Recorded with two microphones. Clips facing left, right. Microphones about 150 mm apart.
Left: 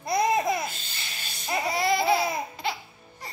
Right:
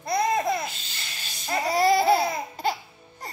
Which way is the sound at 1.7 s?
40° right (ahead or behind).